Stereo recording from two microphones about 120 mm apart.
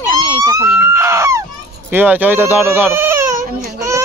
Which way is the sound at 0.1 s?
30° left (ahead or behind).